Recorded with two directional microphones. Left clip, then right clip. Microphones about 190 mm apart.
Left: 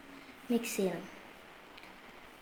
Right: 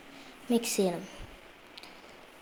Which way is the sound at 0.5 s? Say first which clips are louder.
Right 5 dB; 30° right (ahead or behind).